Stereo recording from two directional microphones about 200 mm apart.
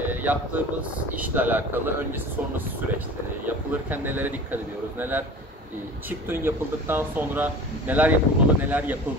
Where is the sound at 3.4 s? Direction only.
10° right (ahead or behind).